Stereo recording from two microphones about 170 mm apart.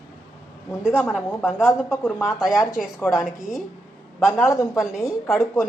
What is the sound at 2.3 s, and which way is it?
Speech, 5° right (ahead or behind).